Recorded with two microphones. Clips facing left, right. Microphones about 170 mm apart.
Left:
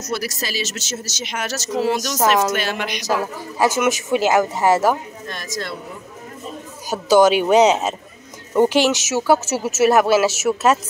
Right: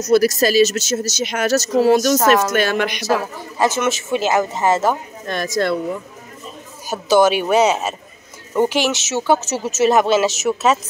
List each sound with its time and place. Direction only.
0.1 s speech: 45° right (ahead or behind)
3.0 s speech: 15° left (ahead or behind)
5.3 s speech: 60° right (ahead or behind)
6.9 s speech: 15° left (ahead or behind)